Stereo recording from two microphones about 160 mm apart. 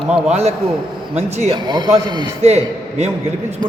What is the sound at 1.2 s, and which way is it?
Speech, 45° right (ahead or behind).